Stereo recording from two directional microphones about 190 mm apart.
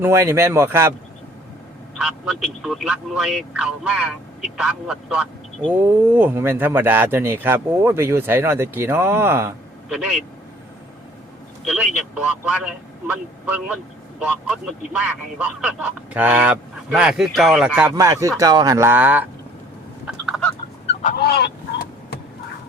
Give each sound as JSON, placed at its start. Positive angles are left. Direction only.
{"t": 0.0, "sound": "speech", "side_deg": -15}
{"t": 2.0, "sound": "speech", "side_deg": 0}
{"t": 11.6, "sound": "speech", "side_deg": -5}
{"t": 14.2, "sound": "a man's voice", "side_deg": -5}
{"t": 17.9, "sound": "speech", "side_deg": -15}
{"t": 20.1, "sound": "chicken", "side_deg": 0}
{"t": 20.8, "sound": "chicken", "side_deg": 40}
{"t": 21.2, "sound": "fowl", "side_deg": 60}